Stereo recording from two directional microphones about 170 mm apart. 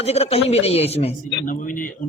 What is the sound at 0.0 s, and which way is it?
A man's voice, 40° left (ahead or behind).